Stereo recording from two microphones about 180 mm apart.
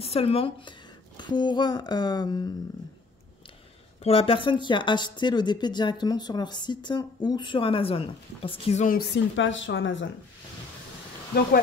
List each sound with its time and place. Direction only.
0.0 s speech: 30° left (ahead or behind)
4.0 s speech: 30° left (ahead or behind)
8.8 s speech: 55° left (ahead or behind); by 10.0 s 90° left